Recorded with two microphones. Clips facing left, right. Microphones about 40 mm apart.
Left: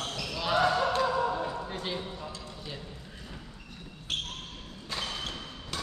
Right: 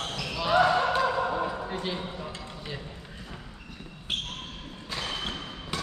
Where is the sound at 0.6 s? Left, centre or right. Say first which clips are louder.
Right 2 dB; centre.